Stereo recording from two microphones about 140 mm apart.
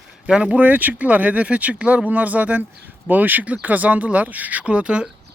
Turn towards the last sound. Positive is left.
turn(degrees=-5)  # may be behind; listen again after turning